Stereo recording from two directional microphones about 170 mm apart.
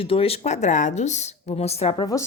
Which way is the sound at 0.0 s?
35° left (ahead or behind).